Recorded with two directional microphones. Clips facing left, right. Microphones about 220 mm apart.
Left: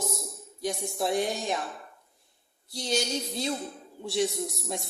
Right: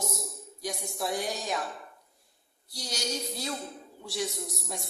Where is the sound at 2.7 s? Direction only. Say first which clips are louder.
Left 6 dB; 25° left (ahead or behind).